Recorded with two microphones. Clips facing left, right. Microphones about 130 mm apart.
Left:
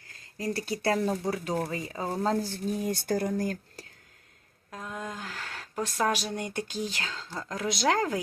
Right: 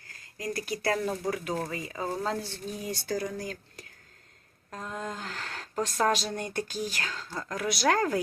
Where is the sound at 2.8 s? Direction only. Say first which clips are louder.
Left 2 dB; 50° left (ahead or behind).